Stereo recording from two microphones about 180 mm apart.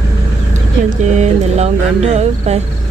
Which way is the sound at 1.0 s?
40° right (ahead or behind).